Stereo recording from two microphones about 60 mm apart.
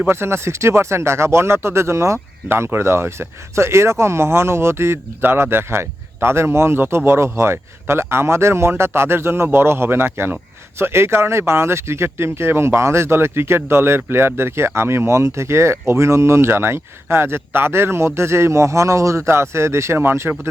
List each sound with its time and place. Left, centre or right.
0.1 s speech: right
2.5 s speech: right